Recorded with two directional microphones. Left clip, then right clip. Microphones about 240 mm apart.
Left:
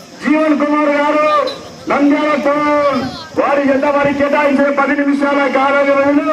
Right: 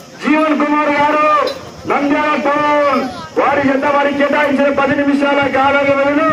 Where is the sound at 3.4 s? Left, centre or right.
Right.